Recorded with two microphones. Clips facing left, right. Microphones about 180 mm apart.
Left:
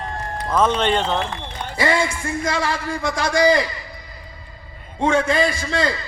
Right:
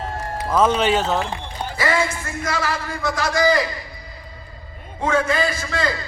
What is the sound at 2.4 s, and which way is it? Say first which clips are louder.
A man's voice: even; 25° left (ahead or behind).